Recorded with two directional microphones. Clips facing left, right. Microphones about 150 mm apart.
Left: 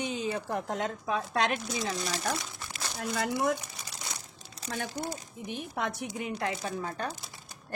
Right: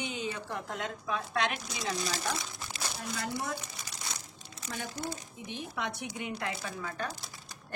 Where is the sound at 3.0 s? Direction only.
65° left (ahead or behind).